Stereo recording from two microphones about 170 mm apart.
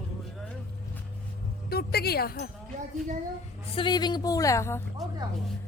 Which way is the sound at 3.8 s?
25° left (ahead or behind).